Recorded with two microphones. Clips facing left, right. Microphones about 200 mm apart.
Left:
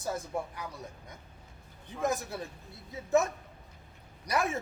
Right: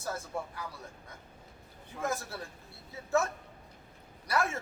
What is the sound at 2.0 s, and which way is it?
A man's voice, 15° left (ahead or behind).